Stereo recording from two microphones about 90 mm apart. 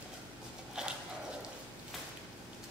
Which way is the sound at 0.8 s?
10° right (ahead or behind).